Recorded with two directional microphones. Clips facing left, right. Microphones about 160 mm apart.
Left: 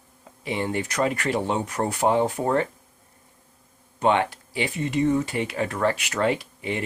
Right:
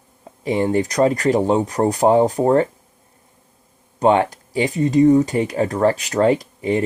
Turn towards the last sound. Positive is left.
turn(degrees=-40)  # may be behind; listen again after turning